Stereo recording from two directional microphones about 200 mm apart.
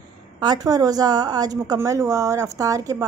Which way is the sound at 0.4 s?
20° right (ahead or behind).